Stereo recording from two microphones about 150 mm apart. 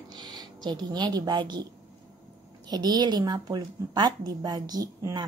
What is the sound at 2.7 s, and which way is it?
A woman's voice, 25° right (ahead or behind).